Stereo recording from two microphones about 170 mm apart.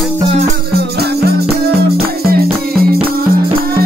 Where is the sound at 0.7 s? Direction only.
70° right (ahead or behind).